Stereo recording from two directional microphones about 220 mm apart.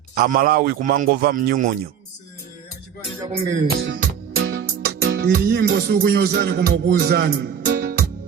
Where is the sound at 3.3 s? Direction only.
40° right (ahead or behind).